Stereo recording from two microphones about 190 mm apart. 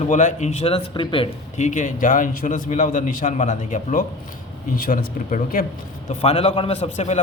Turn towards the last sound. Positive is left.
turn(degrees=30)  # may be behind; listen again after turning